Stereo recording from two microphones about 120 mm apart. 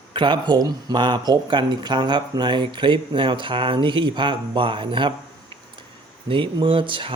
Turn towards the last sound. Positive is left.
turn(degrees=-45)  # may be behind; listen again after turning